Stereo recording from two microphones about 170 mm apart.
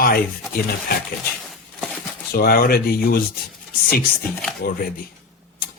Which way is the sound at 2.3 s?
60° left (ahead or behind).